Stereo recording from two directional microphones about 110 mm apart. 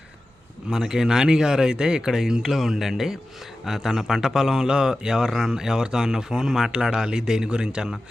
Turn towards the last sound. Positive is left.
turn(degrees=-5)  # may be behind; listen again after turning